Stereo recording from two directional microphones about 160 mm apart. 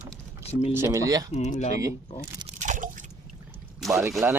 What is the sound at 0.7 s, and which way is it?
Speech, 20° right (ahead or behind).